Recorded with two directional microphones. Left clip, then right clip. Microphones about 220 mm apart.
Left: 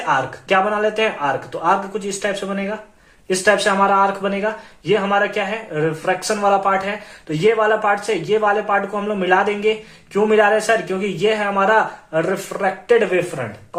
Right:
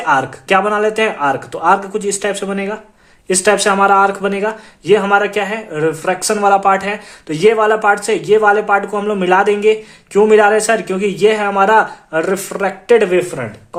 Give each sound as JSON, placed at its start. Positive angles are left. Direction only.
{"t": 0.0, "sound": "speech", "side_deg": -50}